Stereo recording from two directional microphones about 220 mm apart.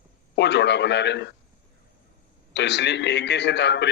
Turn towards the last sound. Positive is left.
turn(degrees=50)  # may be behind; listen again after turning